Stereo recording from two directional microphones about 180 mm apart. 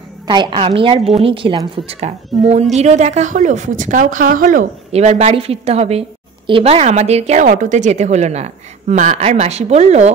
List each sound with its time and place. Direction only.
0.3 s a woman's voice: 25° right (ahead or behind)